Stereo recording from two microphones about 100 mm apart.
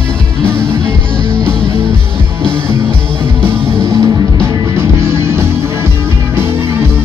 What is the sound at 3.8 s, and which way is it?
Music, 30° right (ahead or behind).